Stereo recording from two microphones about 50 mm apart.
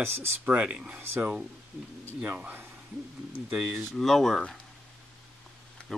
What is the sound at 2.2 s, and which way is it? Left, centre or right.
Speech, right.